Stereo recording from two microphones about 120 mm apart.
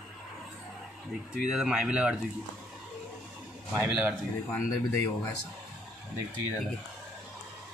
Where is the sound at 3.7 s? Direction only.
15° right (ahead or behind).